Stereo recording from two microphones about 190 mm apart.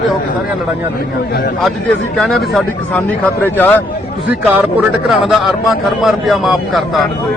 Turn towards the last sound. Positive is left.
turn(degrees=0)  # may be behind; listen again after turning